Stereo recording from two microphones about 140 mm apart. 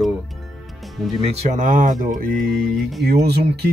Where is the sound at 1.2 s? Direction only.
50° right (ahead or behind); by 2.7 s 90° right.